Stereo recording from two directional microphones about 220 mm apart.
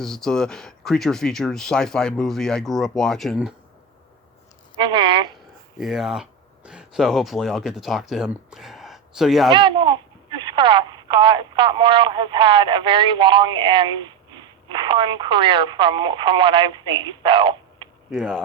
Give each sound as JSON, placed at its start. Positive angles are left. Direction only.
{"t": 0.0, "sound": "speech", "side_deg": 0}
{"t": 4.8, "sound": "speech", "side_deg": -20}
{"t": 5.7, "sound": "speech", "side_deg": 0}
{"t": 9.5, "sound": "speech", "side_deg": -20}
{"t": 18.1, "sound": "speech", "side_deg": 0}